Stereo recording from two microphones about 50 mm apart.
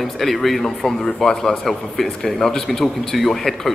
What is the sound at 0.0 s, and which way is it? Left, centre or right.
A man's voice, centre.